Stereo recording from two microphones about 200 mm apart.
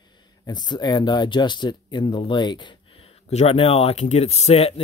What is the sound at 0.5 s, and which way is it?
Speech, 20° left (ahead or behind).